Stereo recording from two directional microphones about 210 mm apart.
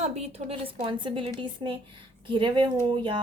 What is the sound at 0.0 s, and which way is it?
A woman's voice, 30° right (ahead or behind).